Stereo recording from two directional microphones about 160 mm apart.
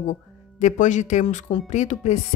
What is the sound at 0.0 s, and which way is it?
Speech, 50° left (ahead or behind).